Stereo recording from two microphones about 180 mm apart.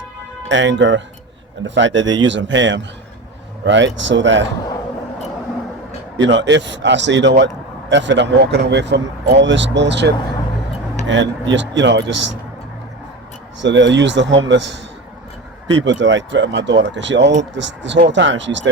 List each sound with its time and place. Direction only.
0.4 s speech: 90° right
6.1 s a man's voice: 85° right
11.1 s a man's voice: 90° right
13.6 s a man's voice: 90° right
15.6 s a man's voice: 90° right